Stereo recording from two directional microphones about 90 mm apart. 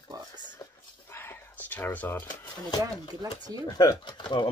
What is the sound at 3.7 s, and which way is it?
Speech, 40° left (ahead or behind).